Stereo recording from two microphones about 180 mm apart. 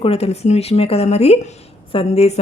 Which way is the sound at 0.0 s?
35° left (ahead or behind).